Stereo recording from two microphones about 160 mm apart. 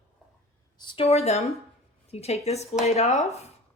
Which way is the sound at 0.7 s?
30° left (ahead or behind).